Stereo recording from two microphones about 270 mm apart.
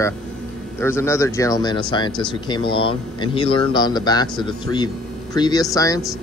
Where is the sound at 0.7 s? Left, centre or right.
Centre.